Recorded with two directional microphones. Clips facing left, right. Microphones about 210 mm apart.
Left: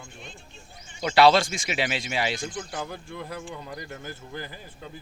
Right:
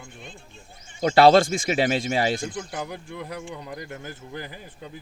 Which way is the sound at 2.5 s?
10° right (ahead or behind).